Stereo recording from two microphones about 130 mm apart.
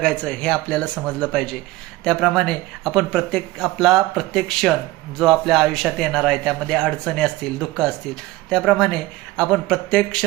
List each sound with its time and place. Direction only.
0.0 s a man's voice: 10° left (ahead or behind)